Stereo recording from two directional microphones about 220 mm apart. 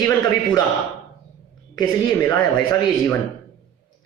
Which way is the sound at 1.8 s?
15° left (ahead or behind).